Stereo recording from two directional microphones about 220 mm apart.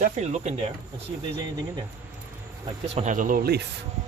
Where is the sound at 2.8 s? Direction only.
30° right (ahead or behind); by 3.7 s 45° right (ahead or behind).